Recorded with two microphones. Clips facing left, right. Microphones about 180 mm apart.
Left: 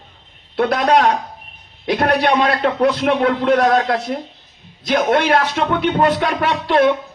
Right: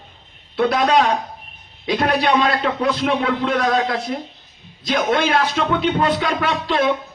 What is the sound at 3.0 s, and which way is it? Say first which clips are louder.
A man's voice: left 3 dB; 50° left (ahead or behind).